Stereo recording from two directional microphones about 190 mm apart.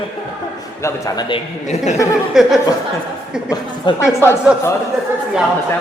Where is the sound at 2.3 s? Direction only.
Centre (ahead or behind).